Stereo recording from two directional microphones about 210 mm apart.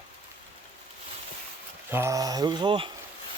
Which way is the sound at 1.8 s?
10° right (ahead or behind).